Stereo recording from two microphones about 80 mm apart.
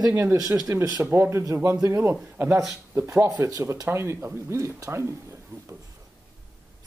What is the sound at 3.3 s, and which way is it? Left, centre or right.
Speech, right.